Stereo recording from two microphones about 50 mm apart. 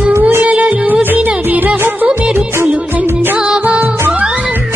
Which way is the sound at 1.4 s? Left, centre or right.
Right.